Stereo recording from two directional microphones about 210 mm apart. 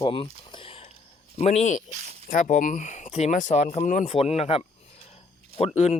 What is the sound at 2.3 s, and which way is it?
Speech, 35° left (ahead or behind).